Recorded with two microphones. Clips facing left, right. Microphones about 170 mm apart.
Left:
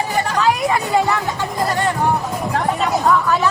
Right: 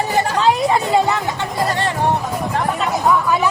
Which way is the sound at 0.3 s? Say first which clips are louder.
Right 1 dB; 25° right (ahead or behind).